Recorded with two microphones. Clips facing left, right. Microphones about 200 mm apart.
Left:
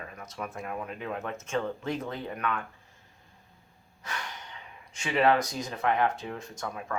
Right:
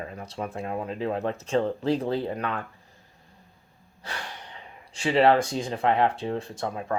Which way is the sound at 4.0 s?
30° right (ahead or behind).